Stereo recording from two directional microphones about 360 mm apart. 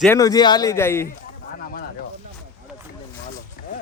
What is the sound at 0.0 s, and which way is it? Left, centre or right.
A man's voice, centre.